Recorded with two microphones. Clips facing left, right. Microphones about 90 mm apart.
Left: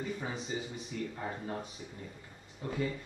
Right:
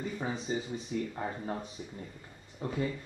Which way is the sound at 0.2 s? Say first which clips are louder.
Right 4 dB; 35° right (ahead or behind).